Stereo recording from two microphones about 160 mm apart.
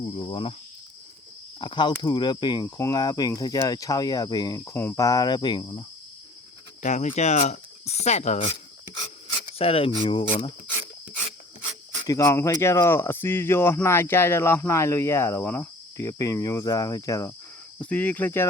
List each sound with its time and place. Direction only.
0.0 s speech: 30° left (ahead or behind)
1.5 s speech: 30° left (ahead or behind)
6.8 s speech: 50° left (ahead or behind)
9.6 s speech: 35° left (ahead or behind)
12.0 s speech: 20° left (ahead or behind)
17.7 s speech: 10° left (ahead or behind)